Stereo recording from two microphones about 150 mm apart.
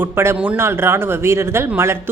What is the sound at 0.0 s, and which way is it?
Speech, 15° right (ahead or behind).